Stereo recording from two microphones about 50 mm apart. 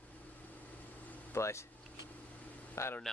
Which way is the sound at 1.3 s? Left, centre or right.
Left.